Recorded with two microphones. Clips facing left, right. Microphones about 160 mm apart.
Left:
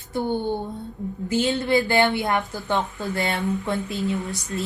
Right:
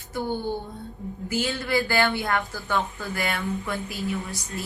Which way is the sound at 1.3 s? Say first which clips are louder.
Left 5 dB; 25° left (ahead or behind).